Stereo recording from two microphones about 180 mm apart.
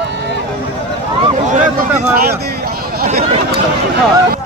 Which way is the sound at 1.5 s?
50° right (ahead or behind).